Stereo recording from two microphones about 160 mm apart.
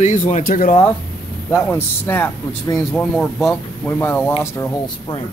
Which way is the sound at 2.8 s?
5° left (ahead or behind).